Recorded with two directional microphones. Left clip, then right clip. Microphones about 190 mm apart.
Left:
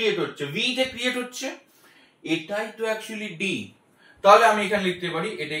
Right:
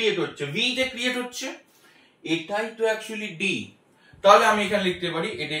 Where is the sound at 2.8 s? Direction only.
15° right (ahead or behind).